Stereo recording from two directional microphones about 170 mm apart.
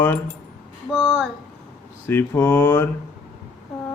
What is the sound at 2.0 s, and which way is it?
Speech, 10° left (ahead or behind).